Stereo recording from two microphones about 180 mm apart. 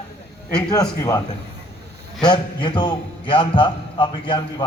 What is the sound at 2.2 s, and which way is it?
Speech, 25° left (ahead or behind).